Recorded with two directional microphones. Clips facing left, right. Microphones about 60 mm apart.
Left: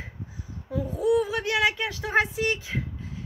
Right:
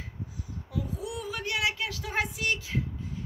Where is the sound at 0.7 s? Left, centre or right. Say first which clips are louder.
Left 11 dB; left.